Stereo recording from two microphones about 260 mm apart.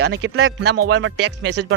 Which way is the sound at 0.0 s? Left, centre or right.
Right.